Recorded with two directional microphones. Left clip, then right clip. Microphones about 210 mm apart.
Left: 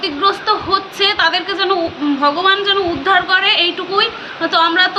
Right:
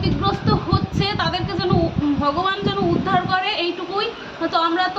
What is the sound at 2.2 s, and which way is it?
A woman's voice, 5° right (ahead or behind).